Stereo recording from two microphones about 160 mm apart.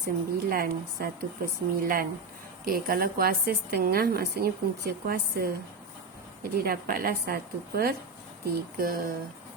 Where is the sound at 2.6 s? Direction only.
65° right (ahead or behind).